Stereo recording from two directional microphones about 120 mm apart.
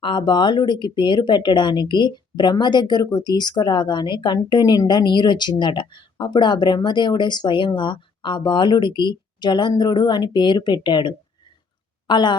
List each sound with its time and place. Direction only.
0.0 s speech: 40° left (ahead or behind)